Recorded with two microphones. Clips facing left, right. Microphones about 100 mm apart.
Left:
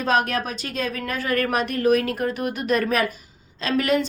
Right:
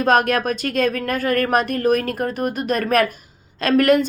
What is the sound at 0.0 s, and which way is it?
A woman's voice, 55° right (ahead or behind).